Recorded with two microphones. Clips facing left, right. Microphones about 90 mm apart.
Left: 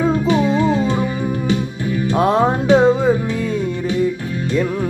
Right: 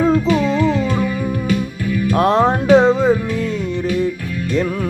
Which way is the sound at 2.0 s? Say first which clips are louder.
Right 1 dB; 20° left (ahead or behind).